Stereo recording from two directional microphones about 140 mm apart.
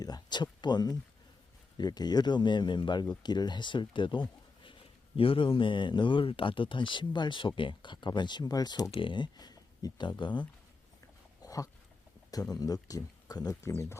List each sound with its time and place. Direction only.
0.0 s speech: 30° left (ahead or behind)
8.9 s speech: 35° left (ahead or behind)
11.4 s dog: 25° left (ahead or behind)
12.3 s speech: 25° left (ahead or behind)